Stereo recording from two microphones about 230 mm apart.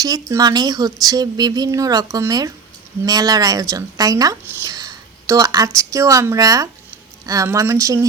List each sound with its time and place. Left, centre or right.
0.0 s speech: centre